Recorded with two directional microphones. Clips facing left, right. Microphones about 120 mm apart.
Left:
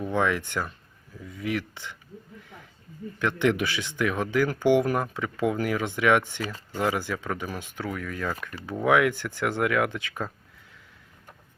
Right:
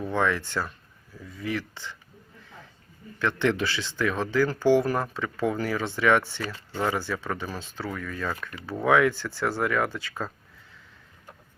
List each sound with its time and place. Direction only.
0.0 s speech: 15° left (ahead or behind)
3.2 s speech: 15° left (ahead or behind)